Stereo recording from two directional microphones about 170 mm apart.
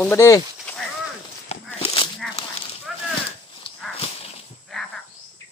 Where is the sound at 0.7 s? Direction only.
10° left (ahead or behind).